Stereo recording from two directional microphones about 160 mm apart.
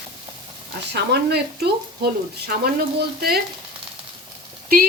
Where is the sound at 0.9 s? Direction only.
90° right.